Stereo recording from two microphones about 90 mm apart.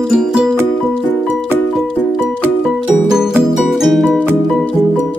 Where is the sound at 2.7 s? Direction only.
5° right (ahead or behind).